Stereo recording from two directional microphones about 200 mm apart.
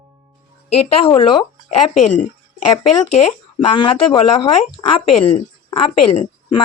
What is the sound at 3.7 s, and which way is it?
Speech, 25° left (ahead or behind).